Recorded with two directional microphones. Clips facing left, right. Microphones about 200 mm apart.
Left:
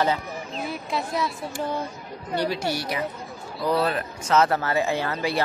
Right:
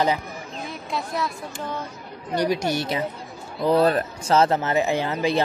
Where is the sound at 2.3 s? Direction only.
15° right (ahead or behind).